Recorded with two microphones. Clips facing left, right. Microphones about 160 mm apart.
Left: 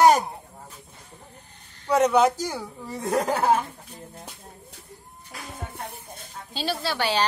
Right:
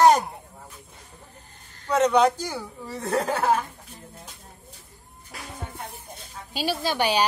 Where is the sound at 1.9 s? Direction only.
10° left (ahead or behind).